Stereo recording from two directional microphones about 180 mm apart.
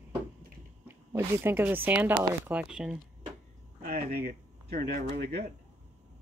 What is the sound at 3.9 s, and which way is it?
Speech, 55° right (ahead or behind).